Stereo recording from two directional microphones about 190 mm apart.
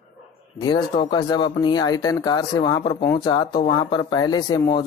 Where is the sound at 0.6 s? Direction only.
20° left (ahead or behind).